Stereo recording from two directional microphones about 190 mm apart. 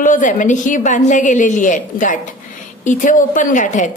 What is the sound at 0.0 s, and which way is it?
A woman's voice, 40° left (ahead or behind).